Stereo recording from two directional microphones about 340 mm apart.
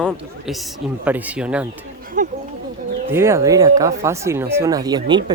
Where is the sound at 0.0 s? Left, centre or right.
Centre.